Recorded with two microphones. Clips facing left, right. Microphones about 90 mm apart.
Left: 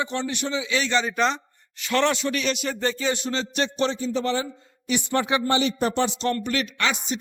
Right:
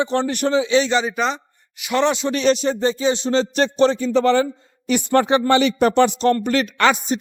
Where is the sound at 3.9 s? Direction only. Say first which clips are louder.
Right 9 dB; 70° right (ahead or behind).